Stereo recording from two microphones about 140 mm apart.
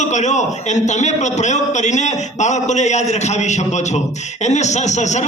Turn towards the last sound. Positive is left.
turn(degrees=55)  # may be behind; listen again after turning